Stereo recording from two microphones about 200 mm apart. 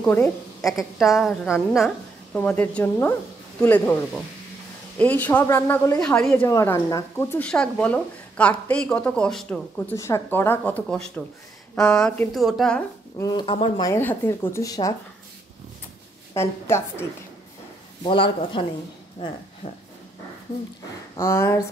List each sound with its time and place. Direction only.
0.0 s a woman's voice: 5° left (ahead or behind)
13.2 s a woman's voice: 20° left (ahead or behind)
16.3 s a woman's voice: 10° left (ahead or behind)
18.0 s speech: 25° left (ahead or behind)
21.2 s a woman's voice: 15° left (ahead or behind)